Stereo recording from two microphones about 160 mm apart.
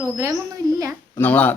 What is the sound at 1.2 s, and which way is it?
Speech, 10° left (ahead or behind).